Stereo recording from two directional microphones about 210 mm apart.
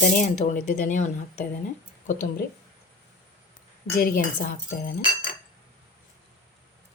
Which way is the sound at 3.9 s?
40° left (ahead or behind).